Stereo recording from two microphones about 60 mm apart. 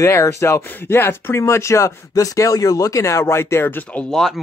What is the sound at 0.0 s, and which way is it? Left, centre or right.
Speech, left.